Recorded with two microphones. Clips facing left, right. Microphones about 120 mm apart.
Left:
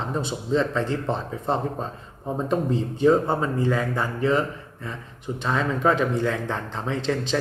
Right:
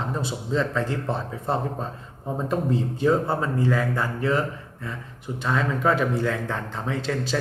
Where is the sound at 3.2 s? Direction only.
20° left (ahead or behind).